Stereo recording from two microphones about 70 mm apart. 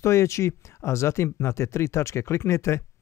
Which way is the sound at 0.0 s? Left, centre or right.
Left.